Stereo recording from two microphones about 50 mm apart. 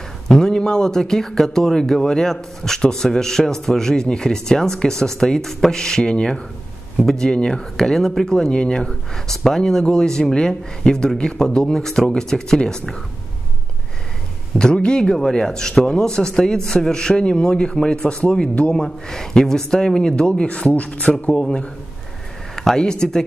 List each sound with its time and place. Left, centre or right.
0.3 s speech: centre
14.6 s speech: centre
18.8 s speech: centre